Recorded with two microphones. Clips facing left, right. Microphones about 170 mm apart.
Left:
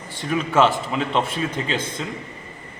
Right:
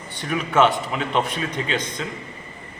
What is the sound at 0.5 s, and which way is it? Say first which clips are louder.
Speech: even; centre (ahead or behind).